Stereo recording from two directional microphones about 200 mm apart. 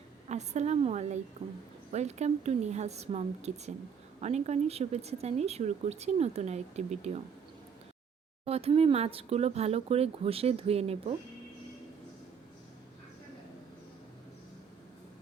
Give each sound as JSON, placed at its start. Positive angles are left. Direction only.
{"t": 0.3, "sound": "speech", "side_deg": -35}
{"t": 8.4, "sound": "speech", "side_deg": -30}